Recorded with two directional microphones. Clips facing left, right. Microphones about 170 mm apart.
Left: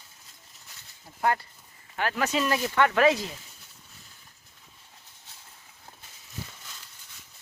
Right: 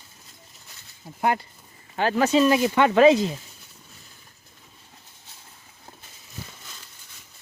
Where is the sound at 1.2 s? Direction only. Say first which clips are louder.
Right 3 dB; 20° right (ahead or behind).